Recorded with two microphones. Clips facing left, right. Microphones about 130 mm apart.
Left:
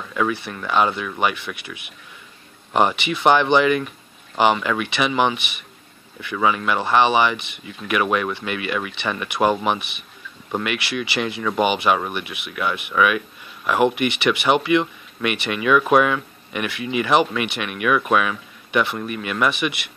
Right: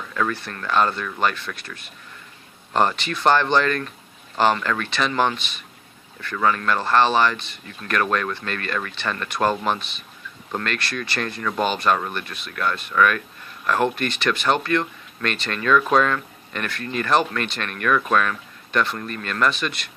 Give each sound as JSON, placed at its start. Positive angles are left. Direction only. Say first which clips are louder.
{"t": 0.1, "sound": "speech", "louder": "left 3 dB", "side_deg": 5}
{"t": 9.8, "sound": "speech", "louder": "left 2 dB", "side_deg": 65}
{"t": 10.5, "sound": "speech", "louder": "left 3 dB", "side_deg": 10}